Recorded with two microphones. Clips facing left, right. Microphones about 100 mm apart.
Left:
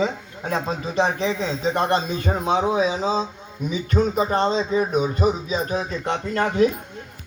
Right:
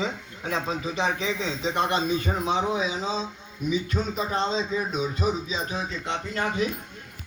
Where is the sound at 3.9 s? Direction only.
55° left (ahead or behind).